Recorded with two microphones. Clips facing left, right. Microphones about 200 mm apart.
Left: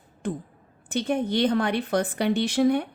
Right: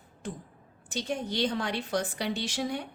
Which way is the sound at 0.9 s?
55° left (ahead or behind).